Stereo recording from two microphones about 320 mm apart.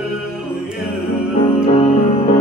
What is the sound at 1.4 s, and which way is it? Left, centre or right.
Music, centre.